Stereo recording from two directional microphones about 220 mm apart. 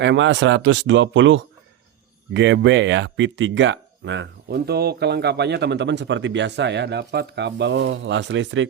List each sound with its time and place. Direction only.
0.0 s speech: 55° right (ahead or behind)